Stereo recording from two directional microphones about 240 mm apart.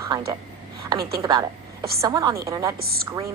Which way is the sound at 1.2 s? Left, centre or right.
Centre.